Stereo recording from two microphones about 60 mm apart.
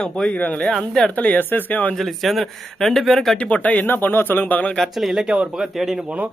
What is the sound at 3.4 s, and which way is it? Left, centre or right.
Speech, left.